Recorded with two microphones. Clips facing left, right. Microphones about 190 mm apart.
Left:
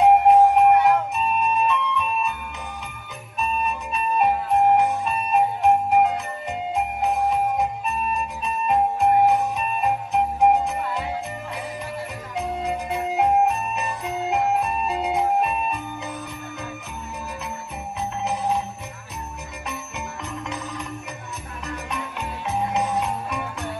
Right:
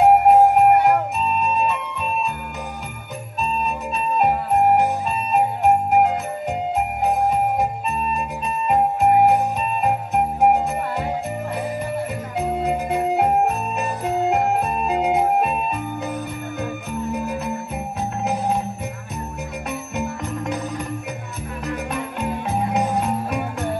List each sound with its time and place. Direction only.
0.0 s music: 45° right (ahead or behind)
3.6 s music: 45° right (ahead or behind)
7.9 s jingle bell: 40° right (ahead or behind)
9.8 s music: 55° right (ahead or behind)
12.4 s organ: 50° right (ahead or behind)
13.7 s music: 45° right (ahead or behind)
18.2 s jingle bell: 50° right (ahead or behind)
21.6 s music: 55° right (ahead or behind)